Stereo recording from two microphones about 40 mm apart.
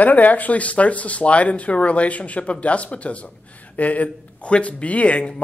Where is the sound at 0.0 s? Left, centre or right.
Left.